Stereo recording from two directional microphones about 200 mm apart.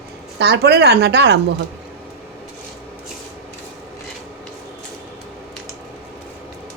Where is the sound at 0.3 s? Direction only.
55° right (ahead or behind).